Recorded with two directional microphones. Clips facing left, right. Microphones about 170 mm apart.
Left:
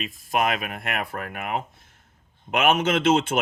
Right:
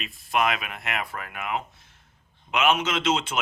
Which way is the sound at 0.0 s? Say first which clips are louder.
Left 1 dB; 45° left (ahead or behind).